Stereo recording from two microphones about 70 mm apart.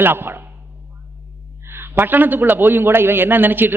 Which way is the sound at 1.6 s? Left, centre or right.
Right.